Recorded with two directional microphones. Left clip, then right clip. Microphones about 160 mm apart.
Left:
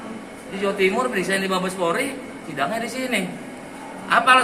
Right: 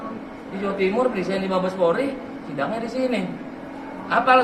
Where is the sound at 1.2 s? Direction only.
20° left (ahead or behind).